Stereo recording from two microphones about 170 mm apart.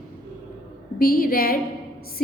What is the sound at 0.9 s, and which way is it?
A capella, 60° left (ahead or behind).